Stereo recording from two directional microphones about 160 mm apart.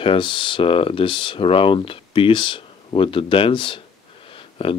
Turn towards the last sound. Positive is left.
turn(degrees=35)  # may be behind; listen again after turning